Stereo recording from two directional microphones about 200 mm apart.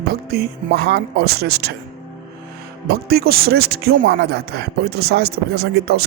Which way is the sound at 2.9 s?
50° right (ahead or behind).